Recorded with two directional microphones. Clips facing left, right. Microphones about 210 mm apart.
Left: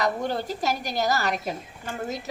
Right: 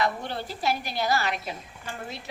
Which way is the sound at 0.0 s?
45° left (ahead or behind).